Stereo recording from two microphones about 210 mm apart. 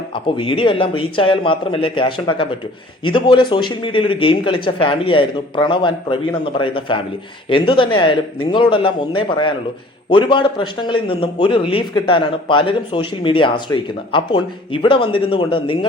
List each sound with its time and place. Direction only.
0.1 s a man's voice: 25° left (ahead or behind)